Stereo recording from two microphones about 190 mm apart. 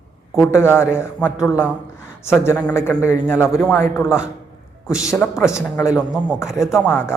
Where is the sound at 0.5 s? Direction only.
10° left (ahead or behind).